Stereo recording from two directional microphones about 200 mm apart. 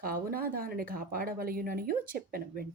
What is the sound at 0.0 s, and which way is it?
Speech, 45° right (ahead or behind).